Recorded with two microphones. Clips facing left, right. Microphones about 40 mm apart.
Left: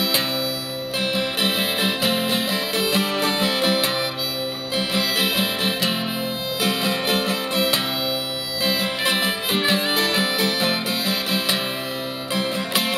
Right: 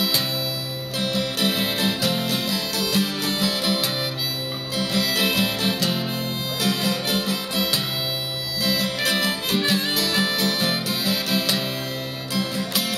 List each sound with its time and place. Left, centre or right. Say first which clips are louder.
0.9 s music: left 1 dB; left
8.6 s harmonica: left 1 dB; left
10.1 s music: left 1 dB; left
12.4 s music: left 2 dB; left